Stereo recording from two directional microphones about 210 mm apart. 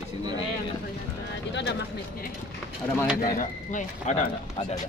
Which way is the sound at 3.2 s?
40° left (ahead or behind).